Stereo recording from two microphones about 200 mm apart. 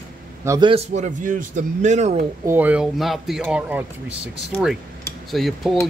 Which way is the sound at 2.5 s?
10° right (ahead or behind).